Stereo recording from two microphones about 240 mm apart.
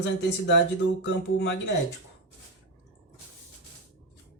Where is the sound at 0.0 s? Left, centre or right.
Left.